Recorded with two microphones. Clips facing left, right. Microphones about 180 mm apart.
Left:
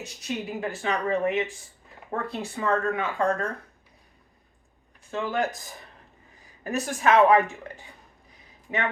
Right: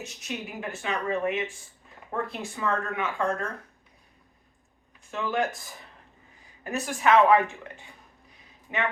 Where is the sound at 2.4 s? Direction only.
35° left (ahead or behind).